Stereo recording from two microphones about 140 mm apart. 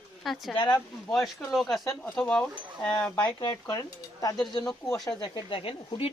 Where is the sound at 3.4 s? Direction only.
25° left (ahead or behind).